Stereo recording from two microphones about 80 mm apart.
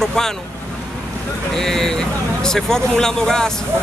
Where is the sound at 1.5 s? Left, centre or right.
Centre.